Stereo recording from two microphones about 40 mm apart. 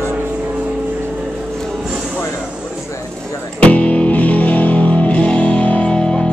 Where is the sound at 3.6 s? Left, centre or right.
Left.